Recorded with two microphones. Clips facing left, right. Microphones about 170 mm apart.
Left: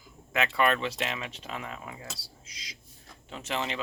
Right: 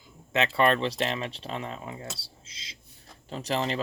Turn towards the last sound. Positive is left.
turn(degrees=-35)  # may be behind; listen again after turning